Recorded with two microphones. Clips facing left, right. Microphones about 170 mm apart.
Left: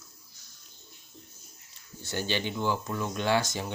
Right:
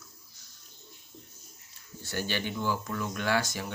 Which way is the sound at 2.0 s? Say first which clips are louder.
Left 2 dB; 20° left (ahead or behind).